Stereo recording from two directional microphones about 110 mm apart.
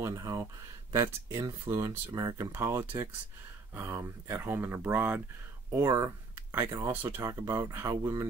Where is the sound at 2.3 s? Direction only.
25° right (ahead or behind).